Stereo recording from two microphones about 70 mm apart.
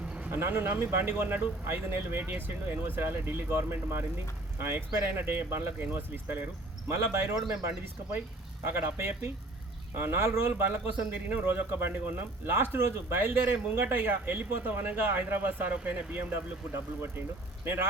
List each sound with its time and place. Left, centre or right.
0.3 s a man's voice: right
8.6 s a man's voice: right
10.9 s a man's voice: right
16.3 s a man's voice: right